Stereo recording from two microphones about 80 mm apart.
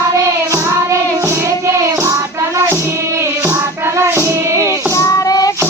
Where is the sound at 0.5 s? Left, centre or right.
Right.